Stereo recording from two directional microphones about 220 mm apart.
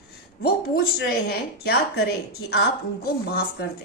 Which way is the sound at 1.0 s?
45° left (ahead or behind).